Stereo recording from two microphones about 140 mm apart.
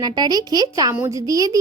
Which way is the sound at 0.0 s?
30° right (ahead or behind).